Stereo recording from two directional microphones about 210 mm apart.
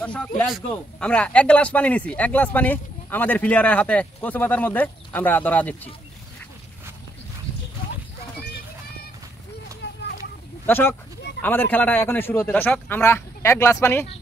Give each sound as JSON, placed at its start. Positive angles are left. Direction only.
{"t": 0.0, "sound": "speech", "side_deg": 5}
{"t": 9.8, "sound": "vehicle", "side_deg": 55}
{"t": 10.7, "sound": "speech", "side_deg": 10}